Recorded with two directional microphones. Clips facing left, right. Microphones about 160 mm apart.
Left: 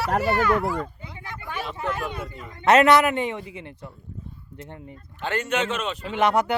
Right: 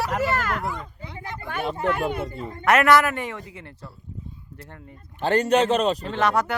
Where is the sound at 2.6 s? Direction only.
20° left (ahead or behind).